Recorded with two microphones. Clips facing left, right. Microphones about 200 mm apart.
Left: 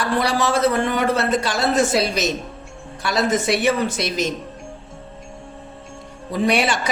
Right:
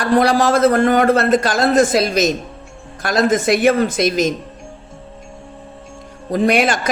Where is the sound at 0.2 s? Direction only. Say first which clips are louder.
Right 5 dB; 50° right (ahead or behind).